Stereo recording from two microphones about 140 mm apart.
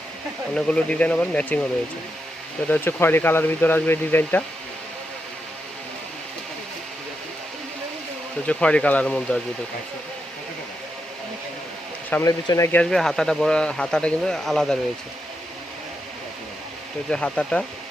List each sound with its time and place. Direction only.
0.5 s speech: 10° left (ahead or behind)
2.6 s speech: 15° left (ahead or behind)
8.4 s speech: 10° left (ahead or behind)
12.2 s speech: 20° left (ahead or behind)
12.8 s speech: 5° left (ahead or behind)
17.1 s speech: 5° left (ahead or behind)